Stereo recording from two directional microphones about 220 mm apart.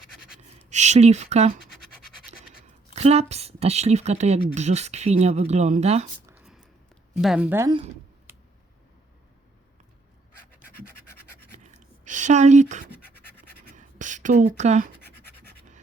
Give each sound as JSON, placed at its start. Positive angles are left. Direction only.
{"t": 0.7, "sound": "speech", "side_deg": -30}
{"t": 2.9, "sound": "speech", "side_deg": -30}
{"t": 6.2, "sound": "a sound", "side_deg": -5}
{"t": 7.2, "sound": "a woman's voice", "side_deg": -5}
{"t": 11.5, "sound": "scratch", "side_deg": -35}
{"t": 13.7, "sound": "writing", "side_deg": -35}